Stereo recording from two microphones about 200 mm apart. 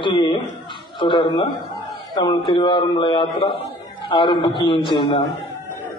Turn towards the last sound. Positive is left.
turn(degrees=25)  # may be behind; listen again after turning